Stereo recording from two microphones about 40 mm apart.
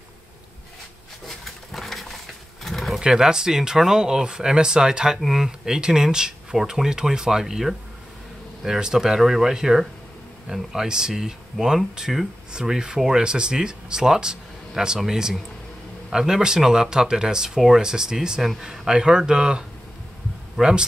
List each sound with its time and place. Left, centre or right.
1.2 s pigeon: centre
3.0 s speech: centre
16.1 s speech: centre
20.6 s speech: centre